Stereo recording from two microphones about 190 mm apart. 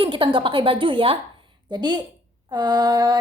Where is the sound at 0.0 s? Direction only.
25° right (ahead or behind).